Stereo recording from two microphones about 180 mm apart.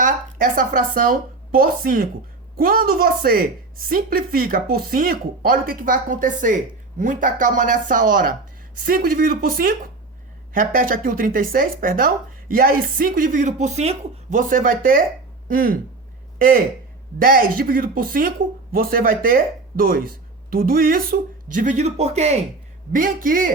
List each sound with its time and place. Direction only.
0.0 s speech: 50° right (ahead or behind)
17.2 s speech: 50° right (ahead or behind); by 22.4 s 35° right (ahead or behind)
22.9 s speech: 50° right (ahead or behind)